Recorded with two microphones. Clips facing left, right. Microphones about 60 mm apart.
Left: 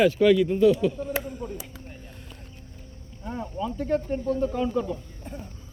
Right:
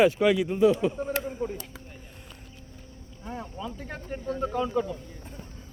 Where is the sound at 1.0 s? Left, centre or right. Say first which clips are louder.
Right 1 dB; right.